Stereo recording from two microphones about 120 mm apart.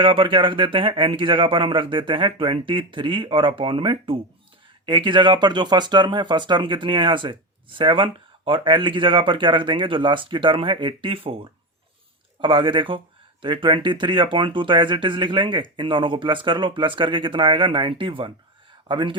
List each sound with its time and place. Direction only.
0.0 s speech: 45° right (ahead or behind)